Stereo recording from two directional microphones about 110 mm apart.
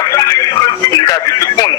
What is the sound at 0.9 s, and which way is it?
Music, 30° left (ahead or behind).